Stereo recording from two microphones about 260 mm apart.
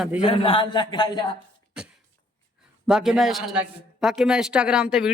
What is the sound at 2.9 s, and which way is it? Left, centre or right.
A man's voice, centre.